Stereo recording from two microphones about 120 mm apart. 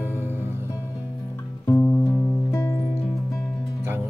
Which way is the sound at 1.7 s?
30° left (ahead or behind).